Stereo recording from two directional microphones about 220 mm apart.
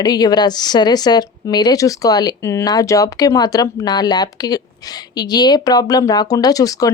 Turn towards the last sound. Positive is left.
turn(degrees=15)  # may be behind; listen again after turning